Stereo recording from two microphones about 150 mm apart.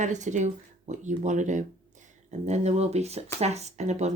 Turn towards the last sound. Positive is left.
turn(degrees=-50)  # may be behind; listen again after turning